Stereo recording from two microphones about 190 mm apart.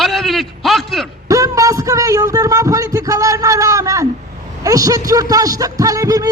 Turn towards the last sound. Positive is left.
turn(degrees=-20)  # may be behind; listen again after turning